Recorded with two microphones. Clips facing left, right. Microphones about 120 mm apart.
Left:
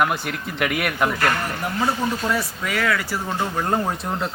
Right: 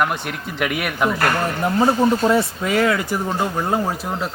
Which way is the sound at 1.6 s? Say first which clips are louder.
Right 8 dB; 30° right (ahead or behind).